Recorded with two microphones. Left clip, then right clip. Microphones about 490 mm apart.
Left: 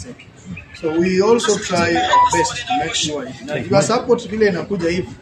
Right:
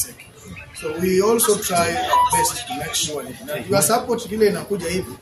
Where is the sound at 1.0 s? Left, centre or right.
Right.